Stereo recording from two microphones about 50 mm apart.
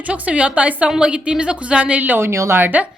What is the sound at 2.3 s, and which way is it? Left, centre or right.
Speech, right.